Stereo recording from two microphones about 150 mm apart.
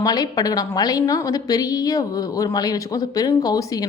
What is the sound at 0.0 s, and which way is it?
A woman's voice, 25° left (ahead or behind).